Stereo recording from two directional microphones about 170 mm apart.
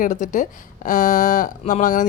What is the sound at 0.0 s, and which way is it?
Speech, 45° left (ahead or behind).